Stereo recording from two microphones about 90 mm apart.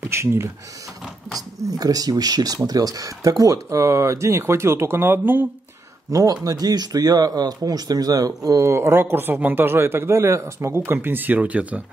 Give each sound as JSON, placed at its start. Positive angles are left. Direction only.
{"t": 0.0, "sound": "speech", "side_deg": -30}
{"t": 1.7, "sound": "speech", "side_deg": -45}
{"t": 6.0, "sound": "speech", "side_deg": -40}